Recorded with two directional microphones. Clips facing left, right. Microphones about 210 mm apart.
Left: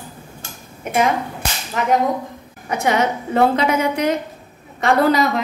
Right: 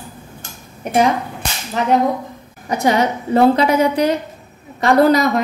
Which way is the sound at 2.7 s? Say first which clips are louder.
Right 2 dB; 35° right (ahead or behind).